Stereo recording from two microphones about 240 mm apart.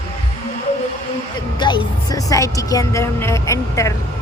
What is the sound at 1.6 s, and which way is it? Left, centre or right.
A woman's voice, centre.